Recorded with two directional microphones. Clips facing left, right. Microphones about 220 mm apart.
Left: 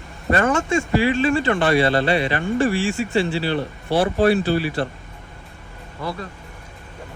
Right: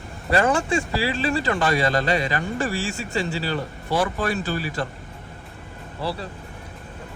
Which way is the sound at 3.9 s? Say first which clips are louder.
Left 6 dB; 45° left (ahead or behind).